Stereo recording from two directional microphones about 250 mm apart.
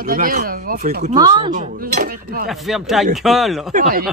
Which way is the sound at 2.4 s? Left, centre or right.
Centre.